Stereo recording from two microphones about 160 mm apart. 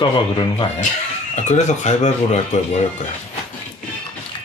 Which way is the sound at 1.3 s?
45° left (ahead or behind).